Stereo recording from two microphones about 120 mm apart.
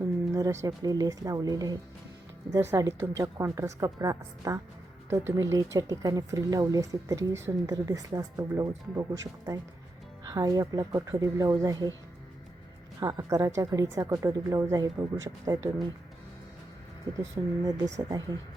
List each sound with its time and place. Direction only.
0.0 s speech: 30° right (ahead or behind)
13.0 s speech: 30° right (ahead or behind)
17.3 s speech: 30° right (ahead or behind)